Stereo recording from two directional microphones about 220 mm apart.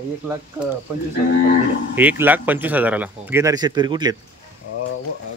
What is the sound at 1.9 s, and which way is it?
Speech, 10° right (ahead or behind).